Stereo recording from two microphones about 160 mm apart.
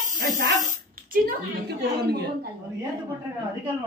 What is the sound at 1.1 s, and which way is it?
Speech, 65° right (ahead or behind).